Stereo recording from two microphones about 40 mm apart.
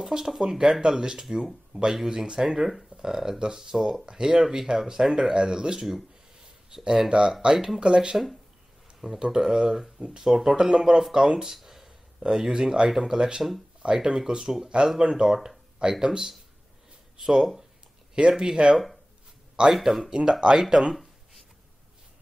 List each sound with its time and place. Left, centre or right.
0.0 s speech: centre
1.7 s speech: right
3.7 s speech: centre
4.0 s speech: centre
7.1 s speech: right
15.0 s speech: right
15.2 s speech: centre
18.1 s speech: centre
19.7 s speech: centre